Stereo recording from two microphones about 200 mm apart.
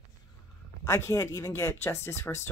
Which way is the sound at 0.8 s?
15° left (ahead or behind).